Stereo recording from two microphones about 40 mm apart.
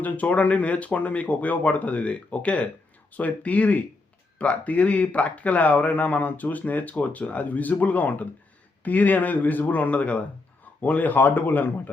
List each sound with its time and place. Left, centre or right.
0.0 s speech: left